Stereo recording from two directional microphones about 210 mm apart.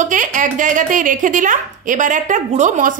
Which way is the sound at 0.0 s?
40° right (ahead or behind).